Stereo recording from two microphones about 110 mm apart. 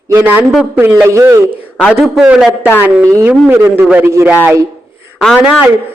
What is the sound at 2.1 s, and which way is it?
Speech, 5° right (ahead or behind).